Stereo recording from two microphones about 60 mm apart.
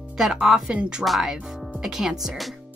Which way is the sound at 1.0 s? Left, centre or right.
Centre.